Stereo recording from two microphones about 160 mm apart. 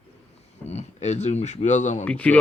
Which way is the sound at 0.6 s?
45° left (ahead or behind).